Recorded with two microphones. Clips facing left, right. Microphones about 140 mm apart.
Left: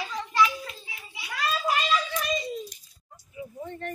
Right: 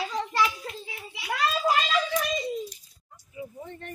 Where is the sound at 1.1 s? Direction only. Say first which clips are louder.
Right 6 dB; 70° right (ahead or behind).